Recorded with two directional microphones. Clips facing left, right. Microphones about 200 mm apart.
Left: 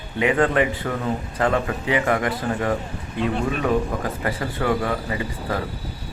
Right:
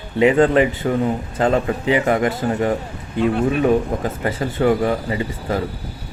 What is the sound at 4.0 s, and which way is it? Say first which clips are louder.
A man's voice: right 3 dB; 25° right (ahead or behind).